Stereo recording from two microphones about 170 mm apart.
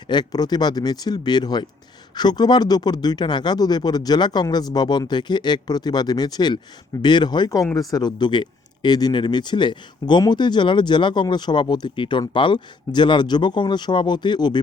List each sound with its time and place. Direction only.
0.1 s speech: 25° left (ahead or behind)